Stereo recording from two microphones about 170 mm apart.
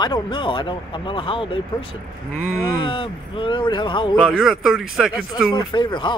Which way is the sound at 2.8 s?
30° left (ahead or behind).